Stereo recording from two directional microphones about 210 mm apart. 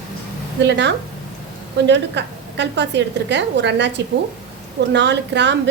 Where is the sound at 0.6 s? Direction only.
55° right (ahead or behind).